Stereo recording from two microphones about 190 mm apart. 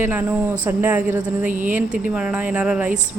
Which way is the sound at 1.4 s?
40° right (ahead or behind).